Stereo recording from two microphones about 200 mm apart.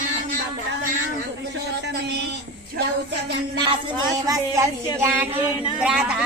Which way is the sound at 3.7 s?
20° right (ahead or behind).